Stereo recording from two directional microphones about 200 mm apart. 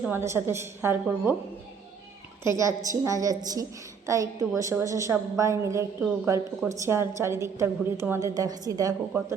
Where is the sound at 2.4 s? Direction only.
15° right (ahead or behind).